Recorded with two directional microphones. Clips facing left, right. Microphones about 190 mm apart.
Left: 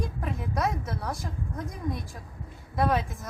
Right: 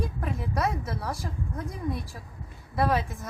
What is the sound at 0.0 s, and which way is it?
A woman's voice, centre (ahead or behind).